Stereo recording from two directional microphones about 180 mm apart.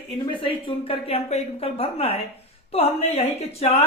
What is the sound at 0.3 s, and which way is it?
Speech, 30° left (ahead or behind).